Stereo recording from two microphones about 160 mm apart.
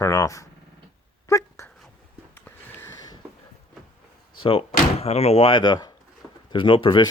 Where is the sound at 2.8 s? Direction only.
20° left (ahead or behind).